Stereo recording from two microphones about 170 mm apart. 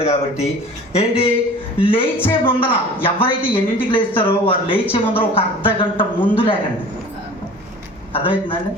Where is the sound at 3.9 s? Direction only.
30° left (ahead or behind).